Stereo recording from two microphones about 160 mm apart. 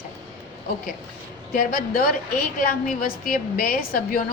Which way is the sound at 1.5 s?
65° left (ahead or behind).